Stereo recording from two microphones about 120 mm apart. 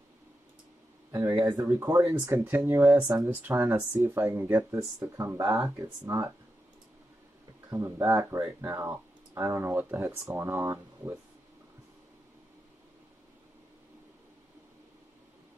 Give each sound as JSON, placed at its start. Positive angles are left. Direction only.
{"t": 1.4, "sound": "speech", "side_deg": -30}
{"t": 7.7, "sound": "speech", "side_deg": -25}